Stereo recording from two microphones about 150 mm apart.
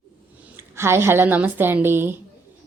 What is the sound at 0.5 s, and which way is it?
Speech, 15° right (ahead or behind).